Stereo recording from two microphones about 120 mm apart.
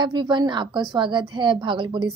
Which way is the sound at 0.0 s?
35° right (ahead or behind).